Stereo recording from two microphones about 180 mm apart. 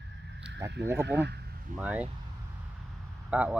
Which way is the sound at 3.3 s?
5° right (ahead or behind).